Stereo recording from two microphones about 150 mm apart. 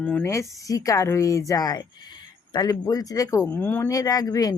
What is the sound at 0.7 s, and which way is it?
Speech, 20° left (ahead or behind).